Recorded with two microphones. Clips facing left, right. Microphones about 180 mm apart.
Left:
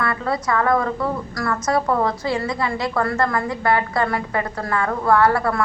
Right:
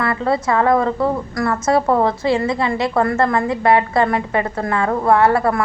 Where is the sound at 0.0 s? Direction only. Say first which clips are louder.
Right 4 dB; 25° right (ahead or behind).